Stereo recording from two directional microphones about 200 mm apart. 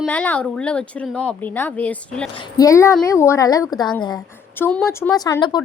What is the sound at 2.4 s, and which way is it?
A woman's voice, 20° left (ahead or behind).